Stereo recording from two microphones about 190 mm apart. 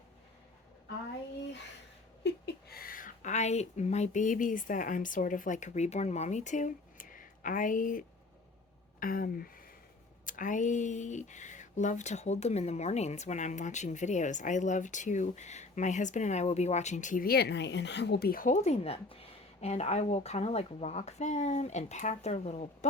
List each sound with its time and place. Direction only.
2.2 s speech: 60° left (ahead or behind); by 22.9 s 35° left (ahead or behind)